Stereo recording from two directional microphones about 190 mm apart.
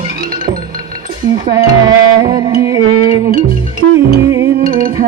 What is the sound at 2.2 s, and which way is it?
Music, 20° right (ahead or behind).